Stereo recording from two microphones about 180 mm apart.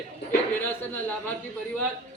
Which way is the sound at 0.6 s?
10° left (ahead or behind).